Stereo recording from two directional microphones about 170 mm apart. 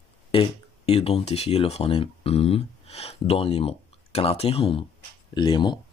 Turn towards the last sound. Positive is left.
turn(degrees=25)  # may be behind; listen again after turning